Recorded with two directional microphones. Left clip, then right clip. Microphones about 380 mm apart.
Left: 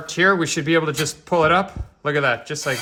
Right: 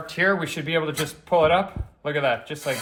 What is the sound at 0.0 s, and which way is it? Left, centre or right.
Speech, centre.